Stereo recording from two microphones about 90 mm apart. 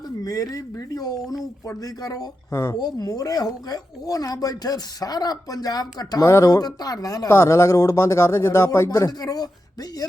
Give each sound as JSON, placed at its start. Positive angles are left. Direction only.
{"t": 0.5, "sound": "speech", "side_deg": 40}
{"t": 6.2, "sound": "speech", "side_deg": 35}
{"t": 7.3, "sound": "speech", "side_deg": 30}
{"t": 9.0, "sound": "speech", "side_deg": 45}